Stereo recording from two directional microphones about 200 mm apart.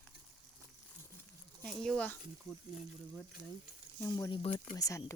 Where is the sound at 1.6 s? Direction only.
Centre (ahead or behind).